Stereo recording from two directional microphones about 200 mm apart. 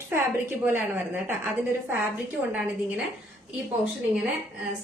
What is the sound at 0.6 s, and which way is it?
A woman's voice, 10° right (ahead or behind).